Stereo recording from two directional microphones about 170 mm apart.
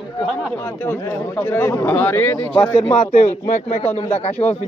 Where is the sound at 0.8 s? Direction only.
15° left (ahead or behind).